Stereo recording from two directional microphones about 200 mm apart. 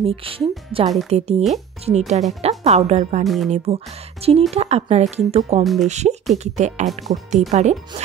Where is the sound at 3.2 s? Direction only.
Centre (ahead or behind).